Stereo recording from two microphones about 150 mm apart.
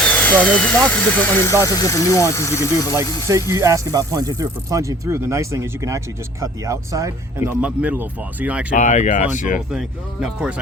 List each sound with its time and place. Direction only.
0.0 s speech: 10° left (ahead or behind)
2.9 s speech: 20° right (ahead or behind)
7.6 s speech: 10° right (ahead or behind)
8.7 s speech: 50° left (ahead or behind)
9.6 s speech: 5° right (ahead or behind)